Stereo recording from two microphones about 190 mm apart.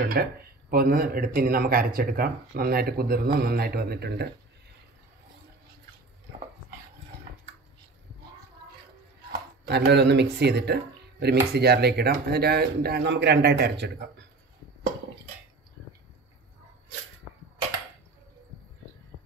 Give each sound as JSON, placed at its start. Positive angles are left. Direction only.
{"t": 0.0, "sound": "speech", "side_deg": -55}
{"t": 9.7, "sound": "a man's voice", "side_deg": -60}